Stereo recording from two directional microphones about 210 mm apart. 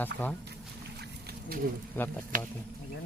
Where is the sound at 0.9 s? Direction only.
50° right (ahead or behind).